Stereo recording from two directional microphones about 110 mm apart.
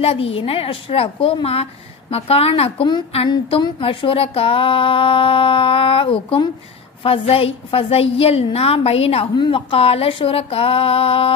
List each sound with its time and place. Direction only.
0.0 s a woman's voice: 60° left (ahead or behind)
3.6 s a woman's voice: 50° left (ahead or behind)
9.3 s a woman's voice: 50° left (ahead or behind)